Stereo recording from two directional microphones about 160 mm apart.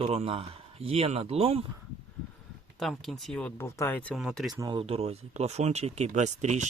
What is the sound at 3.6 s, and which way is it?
Speech, 15° left (ahead or behind).